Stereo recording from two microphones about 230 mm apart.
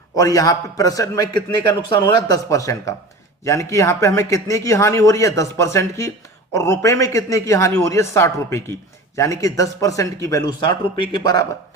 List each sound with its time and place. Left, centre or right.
0.2 s speech: centre